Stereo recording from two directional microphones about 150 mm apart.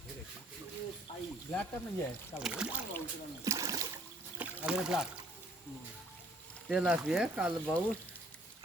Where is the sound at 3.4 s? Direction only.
20° right (ahead or behind).